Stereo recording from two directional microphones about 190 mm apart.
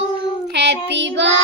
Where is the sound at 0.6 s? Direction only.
65° right (ahead or behind).